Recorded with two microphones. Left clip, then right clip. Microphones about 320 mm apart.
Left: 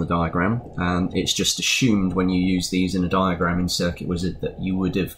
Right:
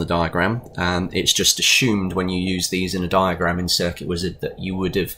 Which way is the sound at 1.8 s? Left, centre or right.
Centre.